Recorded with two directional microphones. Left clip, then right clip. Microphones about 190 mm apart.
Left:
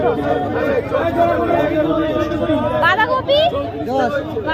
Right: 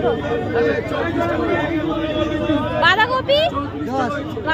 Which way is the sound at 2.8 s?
10° right (ahead or behind).